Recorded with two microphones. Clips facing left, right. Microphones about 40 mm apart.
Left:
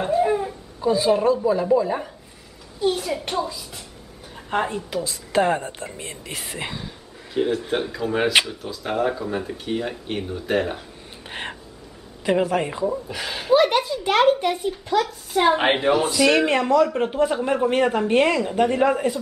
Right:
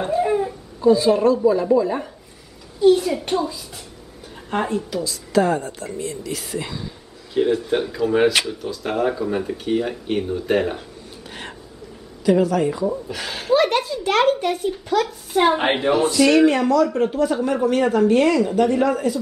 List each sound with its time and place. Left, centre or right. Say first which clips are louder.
0.0 s speech: right 1 dB; centre
4.5 s a woman's voice: right 1 dB; centre
5.0 s speech: right 1 dB; left
7.3 s speech: right 3 dB; centre
12.3 s speech: right 3 dB; left
12.8 s speech: right 1 dB; centre
16.4 s a woman's voice: right 2 dB; left